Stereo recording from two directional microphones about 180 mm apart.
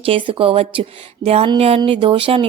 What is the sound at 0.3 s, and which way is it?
A woman's voice, 30° right (ahead or behind).